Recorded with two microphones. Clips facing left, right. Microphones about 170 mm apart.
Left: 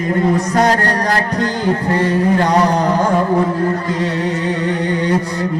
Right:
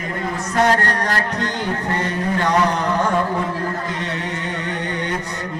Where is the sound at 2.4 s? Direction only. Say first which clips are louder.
Left 5 dB; 35° left (ahead or behind).